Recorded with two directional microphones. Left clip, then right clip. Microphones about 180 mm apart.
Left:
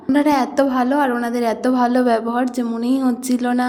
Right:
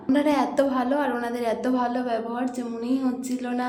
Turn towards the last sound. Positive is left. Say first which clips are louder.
# left 9 dB
turn(degrees=40)  # may be behind; listen again after turning